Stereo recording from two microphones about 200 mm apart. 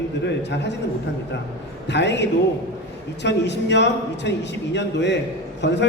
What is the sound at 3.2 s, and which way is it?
A man's voice, 60° left (ahead or behind).